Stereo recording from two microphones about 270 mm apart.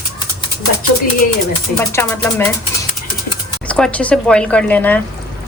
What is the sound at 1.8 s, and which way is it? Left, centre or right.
Speech, centre.